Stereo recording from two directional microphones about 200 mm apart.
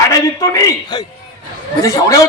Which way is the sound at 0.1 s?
15° left (ahead or behind).